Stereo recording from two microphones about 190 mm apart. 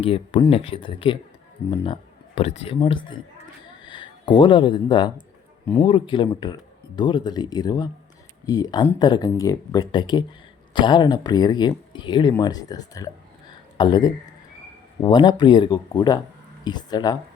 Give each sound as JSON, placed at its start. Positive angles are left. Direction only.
{"t": 0.0, "sound": "speech", "side_deg": 30}